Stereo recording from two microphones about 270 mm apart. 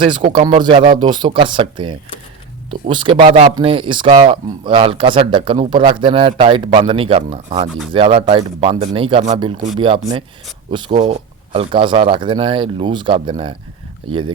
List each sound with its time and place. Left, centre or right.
0.0 s speech: centre